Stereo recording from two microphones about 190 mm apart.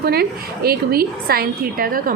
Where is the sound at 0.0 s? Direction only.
55° right (ahead or behind).